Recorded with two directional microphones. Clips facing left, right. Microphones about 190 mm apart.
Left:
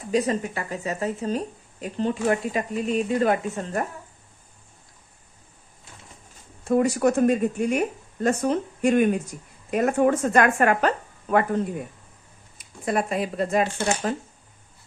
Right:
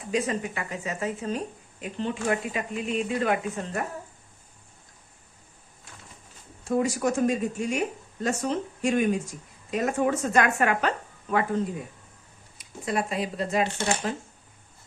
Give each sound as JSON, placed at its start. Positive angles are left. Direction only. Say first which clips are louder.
{"t": 0.1, "sound": "speech", "louder": "left 4 dB", "side_deg": 35}
{"t": 6.7, "sound": "speech", "louder": "left 5 dB", "side_deg": 60}
{"t": 12.5, "sound": "speech", "louder": "left 3 dB", "side_deg": 50}